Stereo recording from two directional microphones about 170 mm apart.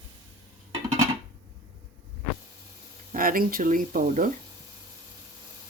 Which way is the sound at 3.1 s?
55° right (ahead or behind).